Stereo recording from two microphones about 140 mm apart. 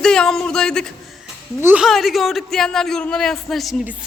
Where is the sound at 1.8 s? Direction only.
Centre (ahead or behind).